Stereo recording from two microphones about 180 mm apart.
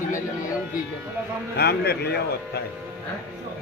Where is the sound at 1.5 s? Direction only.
60° left (ahead or behind).